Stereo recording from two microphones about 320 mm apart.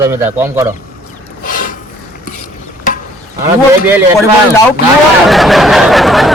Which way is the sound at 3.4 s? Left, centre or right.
Centre.